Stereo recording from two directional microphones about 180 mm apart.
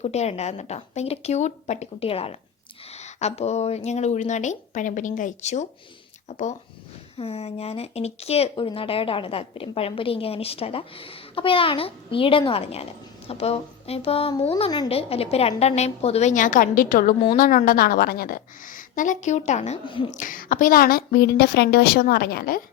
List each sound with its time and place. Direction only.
0.0 s a woman's voice: 35° left (ahead or behind)
20.1 s a woman's voice: 45° left (ahead or behind)